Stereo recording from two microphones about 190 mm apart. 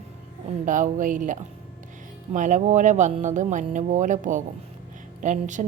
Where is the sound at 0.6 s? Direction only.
45° right (ahead or behind).